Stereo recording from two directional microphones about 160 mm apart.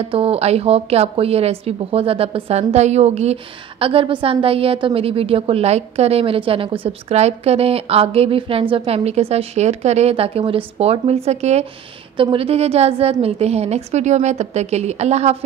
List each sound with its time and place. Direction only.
0.0 s a woman's voice: 35° right (ahead or behind)